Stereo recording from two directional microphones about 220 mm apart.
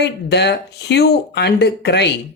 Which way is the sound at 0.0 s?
50° left (ahead or behind).